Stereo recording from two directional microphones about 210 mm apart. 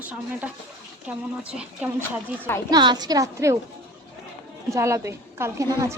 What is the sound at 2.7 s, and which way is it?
Speech, 20° right (ahead or behind).